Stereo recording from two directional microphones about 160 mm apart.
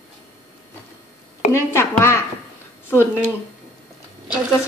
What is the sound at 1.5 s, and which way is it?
Speech, 15° left (ahead or behind).